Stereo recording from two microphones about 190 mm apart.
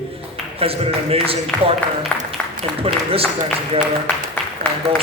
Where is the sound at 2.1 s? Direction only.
10° left (ahead or behind).